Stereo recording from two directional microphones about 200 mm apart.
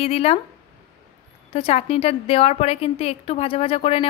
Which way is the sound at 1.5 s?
30° left (ahead or behind).